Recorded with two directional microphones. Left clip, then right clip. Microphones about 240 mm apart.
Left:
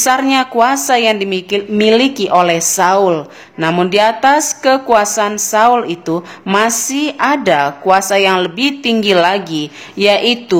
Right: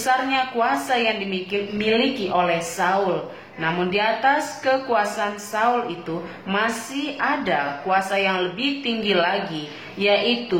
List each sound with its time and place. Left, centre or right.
0.0 s a woman's voice: left